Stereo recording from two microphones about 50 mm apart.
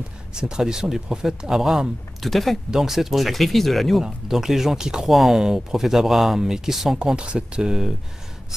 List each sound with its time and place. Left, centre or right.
0.3 s speech: centre
4.0 s speech: centre
7.0 s speech: centre